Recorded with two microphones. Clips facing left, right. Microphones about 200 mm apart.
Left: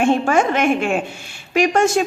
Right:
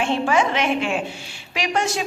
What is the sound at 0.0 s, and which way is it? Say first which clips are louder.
A woman's voice: left 4 dB; 50° left (ahead or behind).